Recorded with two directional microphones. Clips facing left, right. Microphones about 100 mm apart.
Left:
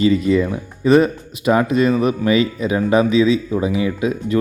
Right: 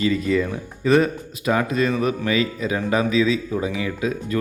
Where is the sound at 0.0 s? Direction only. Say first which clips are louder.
Left 5 dB; 25° left (ahead or behind).